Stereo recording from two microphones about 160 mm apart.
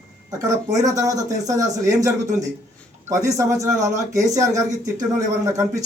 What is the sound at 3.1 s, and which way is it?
Speech, 20° right (ahead or behind).